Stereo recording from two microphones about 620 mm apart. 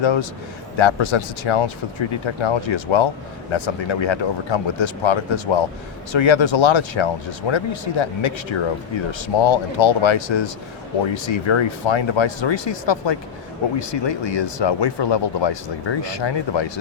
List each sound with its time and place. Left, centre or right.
0.0 s speech: left